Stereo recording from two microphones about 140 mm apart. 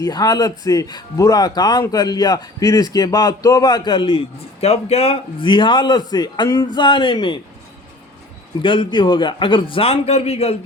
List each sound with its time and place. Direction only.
0.0 s a man's voice: 25° left (ahead or behind)
4.6 s a man's voice: 45° left (ahead or behind)
8.6 s a man's voice: 35° left (ahead or behind)